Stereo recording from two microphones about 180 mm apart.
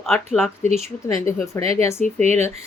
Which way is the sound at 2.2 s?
40° right (ahead or behind).